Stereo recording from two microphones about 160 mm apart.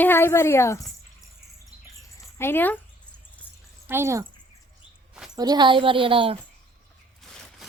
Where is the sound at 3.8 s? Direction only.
15° right (ahead or behind).